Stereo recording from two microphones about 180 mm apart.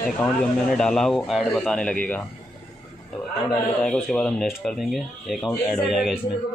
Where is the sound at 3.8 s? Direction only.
10° left (ahead or behind).